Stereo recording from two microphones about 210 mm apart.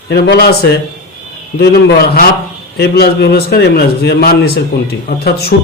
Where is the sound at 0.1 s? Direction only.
50° left (ahead or behind).